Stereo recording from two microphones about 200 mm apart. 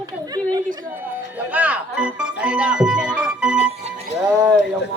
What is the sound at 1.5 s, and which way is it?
Music, 10° right (ahead or behind).